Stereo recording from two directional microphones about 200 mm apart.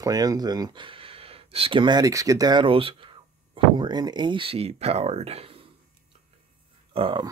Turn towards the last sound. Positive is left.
turn(degrees=-25)  # may be behind; listen again after turning